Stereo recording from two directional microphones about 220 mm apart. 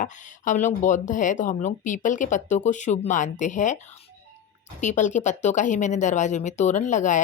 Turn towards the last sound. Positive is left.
turn(degrees=35)  # may be behind; listen again after turning